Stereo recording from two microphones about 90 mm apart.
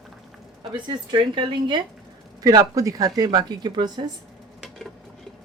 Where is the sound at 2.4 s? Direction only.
45° right (ahead or behind).